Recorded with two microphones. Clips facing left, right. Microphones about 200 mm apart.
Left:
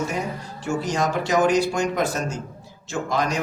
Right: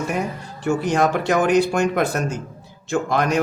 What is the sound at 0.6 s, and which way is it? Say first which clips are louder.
Speech: right 5 dB; 60° right (ahead or behind).